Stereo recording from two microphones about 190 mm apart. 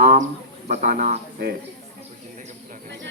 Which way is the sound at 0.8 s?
40° right (ahead or behind).